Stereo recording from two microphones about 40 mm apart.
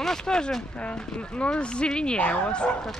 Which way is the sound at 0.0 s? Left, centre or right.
Centre.